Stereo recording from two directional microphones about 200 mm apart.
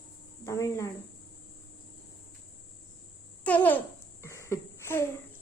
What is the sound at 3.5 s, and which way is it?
Speech, 10° left (ahead or behind).